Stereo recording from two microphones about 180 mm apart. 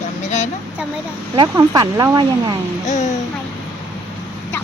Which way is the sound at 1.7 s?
25° right (ahead or behind).